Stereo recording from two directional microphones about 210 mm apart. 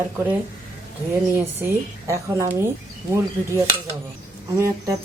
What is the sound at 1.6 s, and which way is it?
Speech, 10° right (ahead or behind).